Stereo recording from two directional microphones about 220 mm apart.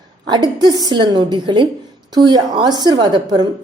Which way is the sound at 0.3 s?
20° right (ahead or behind).